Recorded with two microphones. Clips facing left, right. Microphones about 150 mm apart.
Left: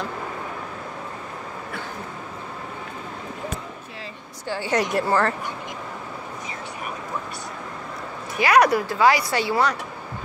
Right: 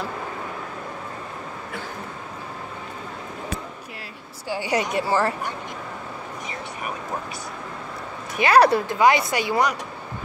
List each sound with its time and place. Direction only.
4.5 s speech: 10° right (ahead or behind)
8.4 s speech: 30° right (ahead or behind)